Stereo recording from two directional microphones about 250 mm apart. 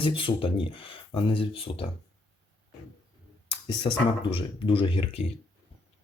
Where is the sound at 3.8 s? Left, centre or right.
Left.